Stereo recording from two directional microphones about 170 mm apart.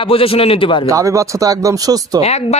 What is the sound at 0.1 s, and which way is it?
Speech, 35° left (ahead or behind).